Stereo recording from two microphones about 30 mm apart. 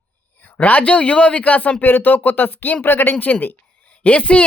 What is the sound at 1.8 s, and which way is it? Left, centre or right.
Speech, left.